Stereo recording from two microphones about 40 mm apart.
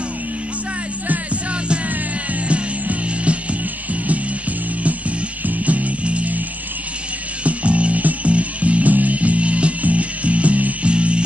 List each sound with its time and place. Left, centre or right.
1.0 s music: right
2.4 s music: right
7.4 s music: right